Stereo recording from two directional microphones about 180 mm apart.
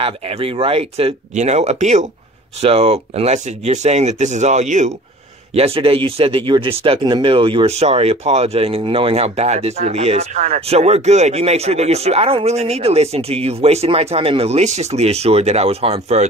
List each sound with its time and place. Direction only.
0.0 s speech: 30° right (ahead or behind)